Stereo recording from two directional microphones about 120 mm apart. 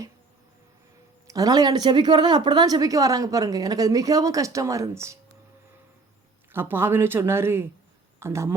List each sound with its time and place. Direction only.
1.3 s speech: 30° right (ahead or behind)
6.5 s speech: 15° right (ahead or behind)